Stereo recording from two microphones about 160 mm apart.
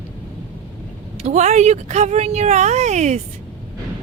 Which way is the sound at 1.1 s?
45° right (ahead or behind).